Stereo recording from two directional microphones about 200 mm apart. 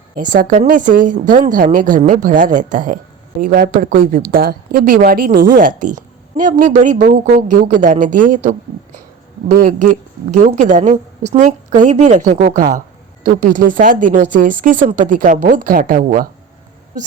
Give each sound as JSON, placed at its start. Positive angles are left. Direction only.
{"t": 0.2, "sound": "a woman's voice", "side_deg": -40}